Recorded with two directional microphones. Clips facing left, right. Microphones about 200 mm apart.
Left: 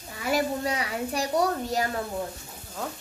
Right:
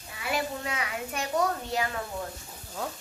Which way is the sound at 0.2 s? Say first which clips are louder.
Left 5 dB; 40° left (ahead or behind).